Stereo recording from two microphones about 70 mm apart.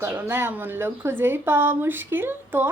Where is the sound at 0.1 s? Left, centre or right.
Right.